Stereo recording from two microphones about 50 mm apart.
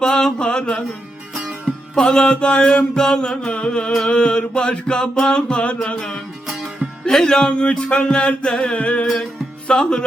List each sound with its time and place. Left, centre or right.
0.0 s a sound: centre
1.5 s music: centre
2.0 s music: left